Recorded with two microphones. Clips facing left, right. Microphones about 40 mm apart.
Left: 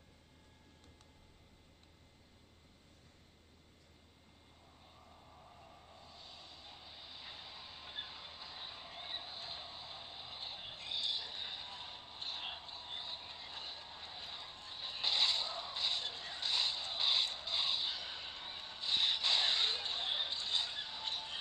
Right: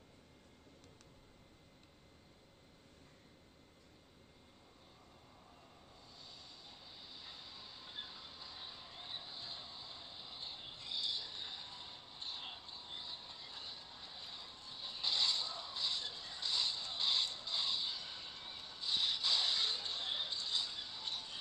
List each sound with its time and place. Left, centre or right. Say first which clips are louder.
5.6 s vehicle: left 3 dB; centre